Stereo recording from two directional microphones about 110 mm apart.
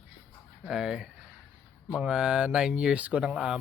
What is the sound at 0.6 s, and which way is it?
Speech, 5° right (ahead or behind).